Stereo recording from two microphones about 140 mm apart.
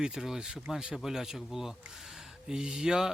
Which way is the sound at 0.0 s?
5° right (ahead or behind).